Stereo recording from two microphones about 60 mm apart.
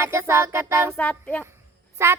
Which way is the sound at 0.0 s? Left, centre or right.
Right.